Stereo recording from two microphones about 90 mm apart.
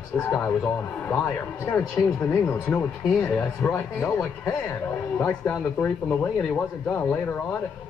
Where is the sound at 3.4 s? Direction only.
15° left (ahead or behind).